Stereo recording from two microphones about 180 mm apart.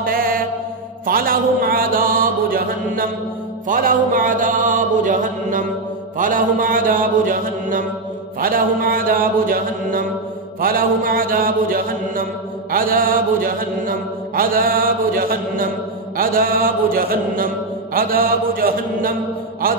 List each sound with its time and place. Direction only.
0.0 s mantra: 50° right (ahead or behind)